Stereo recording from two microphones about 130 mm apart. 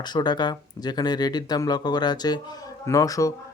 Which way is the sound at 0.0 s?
35° left (ahead or behind).